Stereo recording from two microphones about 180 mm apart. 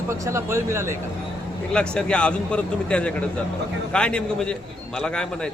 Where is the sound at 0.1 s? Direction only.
15° right (ahead or behind).